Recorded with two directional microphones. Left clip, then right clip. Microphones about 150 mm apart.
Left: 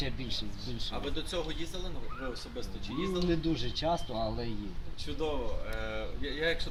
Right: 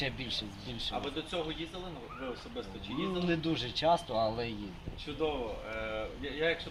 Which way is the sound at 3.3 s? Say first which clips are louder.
Even; 5° left (ahead or behind).